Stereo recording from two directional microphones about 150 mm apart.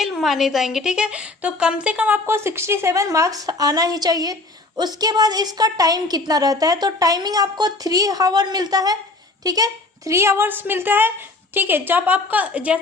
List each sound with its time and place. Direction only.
0.0 s a woman's voice: centre (ahead or behind)